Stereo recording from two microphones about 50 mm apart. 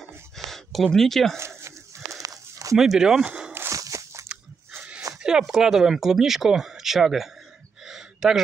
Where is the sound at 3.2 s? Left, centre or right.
Centre.